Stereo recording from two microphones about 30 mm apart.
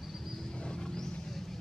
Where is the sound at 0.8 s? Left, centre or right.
Centre.